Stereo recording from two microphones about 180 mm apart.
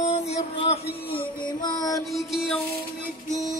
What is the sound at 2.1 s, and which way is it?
Music, centre (ahead or behind).